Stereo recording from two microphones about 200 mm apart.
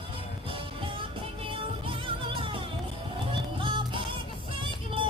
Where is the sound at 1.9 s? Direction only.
25° right (ahead or behind).